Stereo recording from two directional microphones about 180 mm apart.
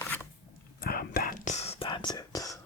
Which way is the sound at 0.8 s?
55° left (ahead or behind).